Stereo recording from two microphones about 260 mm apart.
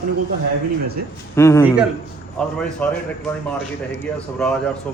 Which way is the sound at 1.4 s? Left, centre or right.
Centre.